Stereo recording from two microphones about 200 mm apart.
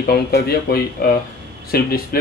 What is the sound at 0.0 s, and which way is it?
Speech, 50° left (ahead or behind).